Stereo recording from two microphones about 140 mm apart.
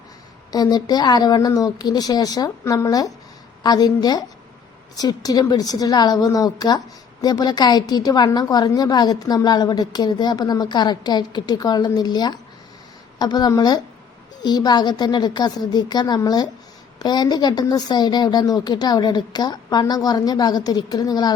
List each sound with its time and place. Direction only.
0.5 s a woman's voice: 30° left (ahead or behind)